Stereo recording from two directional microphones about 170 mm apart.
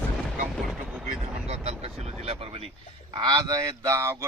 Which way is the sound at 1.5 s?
40° right (ahead or behind).